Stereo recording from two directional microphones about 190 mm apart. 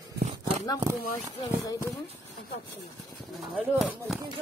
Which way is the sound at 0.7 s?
20° right (ahead or behind).